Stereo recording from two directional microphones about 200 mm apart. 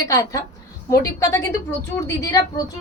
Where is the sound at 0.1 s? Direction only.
15° left (ahead or behind).